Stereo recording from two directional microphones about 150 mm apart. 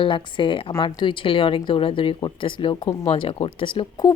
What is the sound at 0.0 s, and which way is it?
Speech, 35° left (ahead or behind).